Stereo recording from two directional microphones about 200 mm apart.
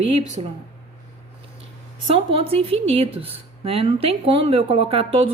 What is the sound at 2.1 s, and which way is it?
A woman's voice, 30° right (ahead or behind).